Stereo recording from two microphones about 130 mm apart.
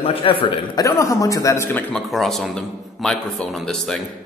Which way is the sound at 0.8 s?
25° left (ahead or behind).